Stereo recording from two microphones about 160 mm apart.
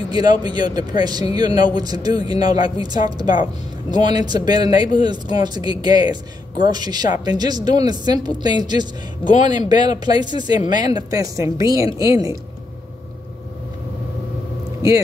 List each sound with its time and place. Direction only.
0.1 s speech: 25° right (ahead or behind)
9.2 s a man's voice: 50° left (ahead or behind)
9.5 s speech: 25° right (ahead or behind)